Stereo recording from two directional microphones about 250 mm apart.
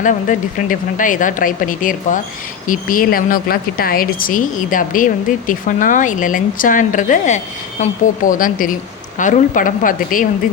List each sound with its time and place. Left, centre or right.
0.0 s speech: left